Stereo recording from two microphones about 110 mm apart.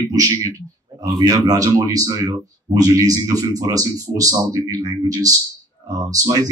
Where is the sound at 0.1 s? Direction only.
30° right (ahead or behind).